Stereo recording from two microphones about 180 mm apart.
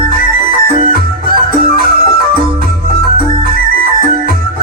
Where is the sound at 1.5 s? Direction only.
55° right (ahead or behind).